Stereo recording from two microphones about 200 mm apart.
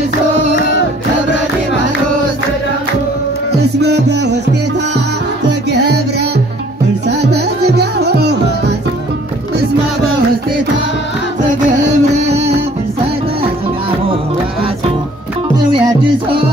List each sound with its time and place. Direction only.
3.5 s music: 55° right (ahead or behind)
5.7 s music: 55° right (ahead or behind)
7.1 s music: 55° right (ahead or behind)
12.0 s music: 35° right (ahead or behind)
15.5 s music: 20° right (ahead or behind)